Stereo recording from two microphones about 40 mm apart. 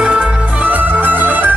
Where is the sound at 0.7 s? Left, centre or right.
Right.